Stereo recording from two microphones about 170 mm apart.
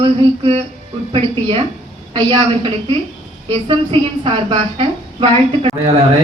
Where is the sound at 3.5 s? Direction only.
30° right (ahead or behind).